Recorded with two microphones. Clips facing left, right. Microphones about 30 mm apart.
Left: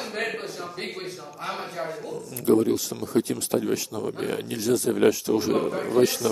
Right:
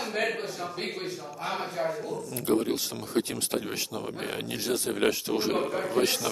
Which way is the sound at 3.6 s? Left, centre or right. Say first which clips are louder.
Left 6 dB; centre.